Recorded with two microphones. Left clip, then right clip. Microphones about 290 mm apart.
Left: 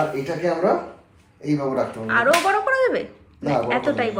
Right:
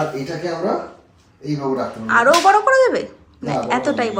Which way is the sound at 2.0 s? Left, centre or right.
Centre.